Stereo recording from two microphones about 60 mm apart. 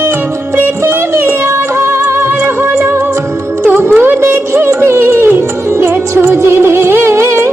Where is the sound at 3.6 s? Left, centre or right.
Right.